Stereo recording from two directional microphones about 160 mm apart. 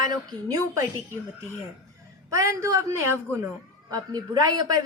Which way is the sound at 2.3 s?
20° right (ahead or behind).